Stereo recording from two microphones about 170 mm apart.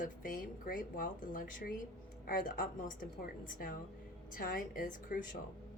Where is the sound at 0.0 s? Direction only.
55° left (ahead or behind).